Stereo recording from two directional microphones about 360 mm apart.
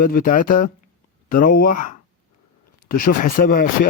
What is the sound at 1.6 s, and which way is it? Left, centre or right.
Speech, left.